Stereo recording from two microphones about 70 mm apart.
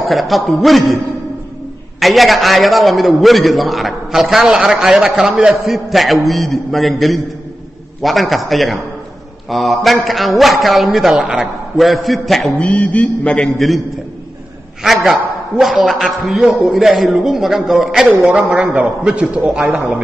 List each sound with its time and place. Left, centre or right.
0.1 s a man's voice: centre
2.0 s a man's voice: centre
12.5 s mantra: centre
14.8 s a man's voice: centre
18.3 s a man's voice: centre